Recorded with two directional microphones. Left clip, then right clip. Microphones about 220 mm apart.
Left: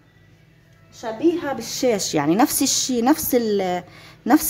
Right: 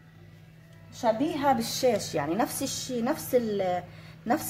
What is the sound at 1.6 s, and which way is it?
A woman's voice, 45° left (ahead or behind).